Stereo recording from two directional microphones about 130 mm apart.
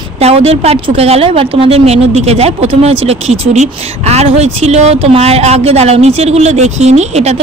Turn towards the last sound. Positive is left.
turn(degrees=-55)  # may be behind; listen again after turning